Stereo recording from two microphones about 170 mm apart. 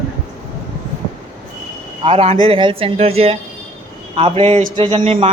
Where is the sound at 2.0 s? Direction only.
35° right (ahead or behind).